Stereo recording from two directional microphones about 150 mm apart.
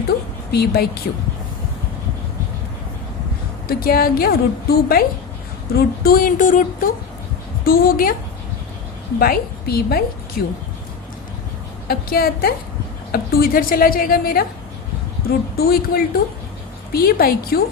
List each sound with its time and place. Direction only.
0.5 s speech: 90° left
3.7 s a woman's voice: 85° left; by 6.9 s 65° left (ahead or behind)
7.6 s a woman's voice: 75° left (ahead or behind)
9.1 s a woman's voice: 85° left
10.4 s a woman's voice: 75° left (ahead or behind)
11.9 s a woman's voice: 80° left
15.3 s a woman's voice: 90° left